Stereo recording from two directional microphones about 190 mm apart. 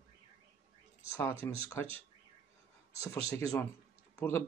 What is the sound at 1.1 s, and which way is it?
Speech, 15° left (ahead or behind).